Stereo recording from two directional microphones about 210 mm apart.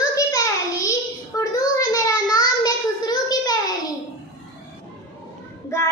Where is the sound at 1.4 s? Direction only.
15° left (ahead or behind).